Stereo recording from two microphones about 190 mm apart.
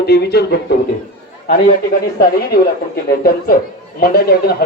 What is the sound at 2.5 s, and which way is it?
Speech, 50° left (ahead or behind).